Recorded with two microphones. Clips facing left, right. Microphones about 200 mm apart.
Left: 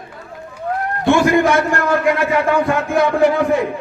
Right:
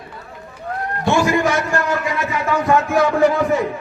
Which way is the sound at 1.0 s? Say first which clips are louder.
Left 4 dB; 55° left (ahead or behind).